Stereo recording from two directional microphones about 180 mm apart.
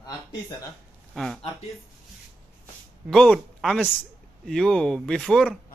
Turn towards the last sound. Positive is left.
turn(degrees=5)  # may be behind; listen again after turning